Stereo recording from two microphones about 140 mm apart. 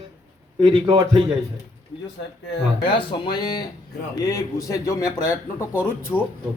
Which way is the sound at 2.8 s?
35° left (ahead or behind).